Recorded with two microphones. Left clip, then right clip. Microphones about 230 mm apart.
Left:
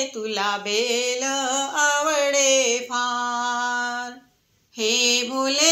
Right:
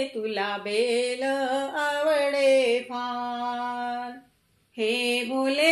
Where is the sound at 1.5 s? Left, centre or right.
Left.